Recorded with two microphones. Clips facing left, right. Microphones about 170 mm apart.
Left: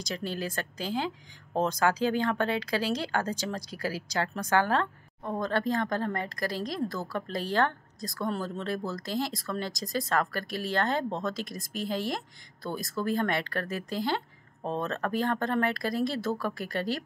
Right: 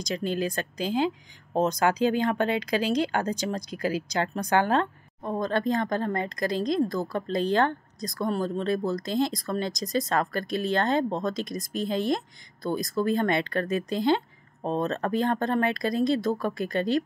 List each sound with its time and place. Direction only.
0.0 s speech: 20° right (ahead or behind)